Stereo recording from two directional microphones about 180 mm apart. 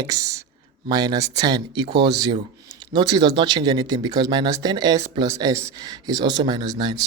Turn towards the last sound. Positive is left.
turn(degrees=-20)  # may be behind; listen again after turning